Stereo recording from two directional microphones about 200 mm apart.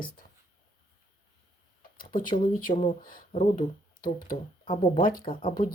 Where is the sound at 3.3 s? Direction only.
40° left (ahead or behind).